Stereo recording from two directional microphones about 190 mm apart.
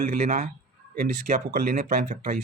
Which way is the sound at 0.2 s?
40° right (ahead or behind).